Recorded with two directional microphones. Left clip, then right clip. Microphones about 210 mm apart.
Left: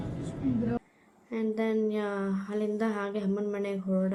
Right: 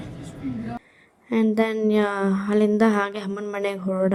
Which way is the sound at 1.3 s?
45° right (ahead or behind).